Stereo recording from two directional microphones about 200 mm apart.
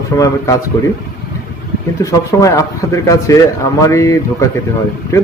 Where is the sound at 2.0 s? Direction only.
15° left (ahead or behind).